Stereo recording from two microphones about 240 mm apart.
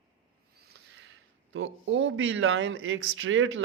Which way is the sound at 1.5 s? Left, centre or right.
Right.